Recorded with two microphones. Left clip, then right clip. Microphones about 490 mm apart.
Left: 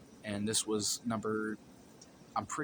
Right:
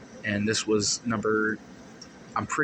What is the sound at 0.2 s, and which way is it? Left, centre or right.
Speech, left.